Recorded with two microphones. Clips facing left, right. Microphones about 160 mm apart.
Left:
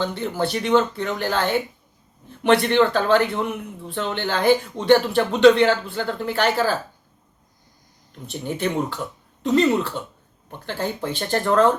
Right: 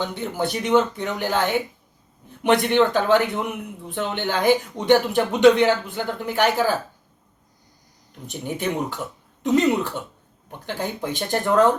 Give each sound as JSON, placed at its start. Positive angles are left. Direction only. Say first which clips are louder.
{"t": 0.0, "sound": "speech", "louder": "left 2 dB", "side_deg": -15}
{"t": 8.3, "sound": "speech", "louder": "left 1 dB", "side_deg": -15}